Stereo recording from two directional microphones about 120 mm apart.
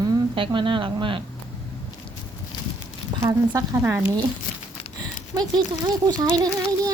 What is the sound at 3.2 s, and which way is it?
Speech, 25° right (ahead or behind).